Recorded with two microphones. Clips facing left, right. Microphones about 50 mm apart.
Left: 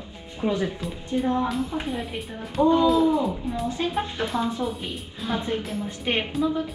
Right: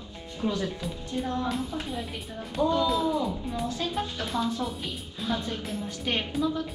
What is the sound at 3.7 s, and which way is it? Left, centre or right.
Speech, left.